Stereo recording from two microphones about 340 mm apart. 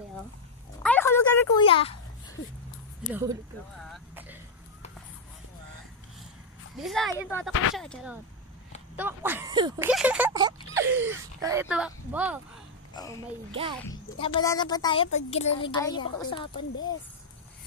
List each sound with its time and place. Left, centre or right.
0.8 s a sound: centre
3.1 s speech: centre
3.9 s a sound: centre
6.8 s speech: centre
12.9 s speech: centre
14.2 s a woman's voice: centre